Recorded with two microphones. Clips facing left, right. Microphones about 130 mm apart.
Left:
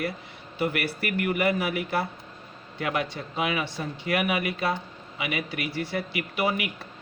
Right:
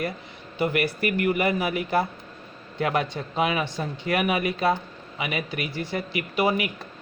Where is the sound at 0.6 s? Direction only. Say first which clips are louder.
Right 4 dB; 20° right (ahead or behind).